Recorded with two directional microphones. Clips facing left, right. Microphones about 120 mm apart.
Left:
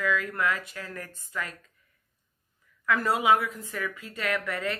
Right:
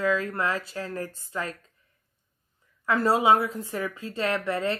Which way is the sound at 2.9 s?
30° right (ahead or behind).